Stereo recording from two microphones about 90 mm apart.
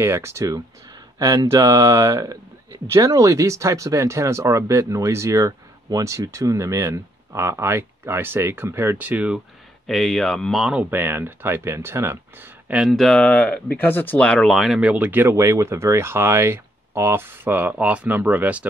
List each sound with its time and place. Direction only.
0.0 s speech: 30° right (ahead or behind)
9.8 s speech: centre (ahead or behind)
10.8 s speech: 20° right (ahead or behind)
12.9 s speech: 5° left (ahead or behind)
14.5 s speech: 5° right (ahead or behind)